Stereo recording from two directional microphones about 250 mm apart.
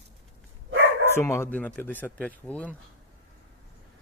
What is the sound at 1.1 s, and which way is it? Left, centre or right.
Speech, centre.